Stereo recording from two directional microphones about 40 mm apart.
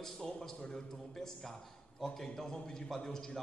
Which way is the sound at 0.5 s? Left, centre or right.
Centre.